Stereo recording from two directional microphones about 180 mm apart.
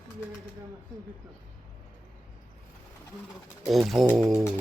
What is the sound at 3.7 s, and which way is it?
Speech, centre (ahead or behind).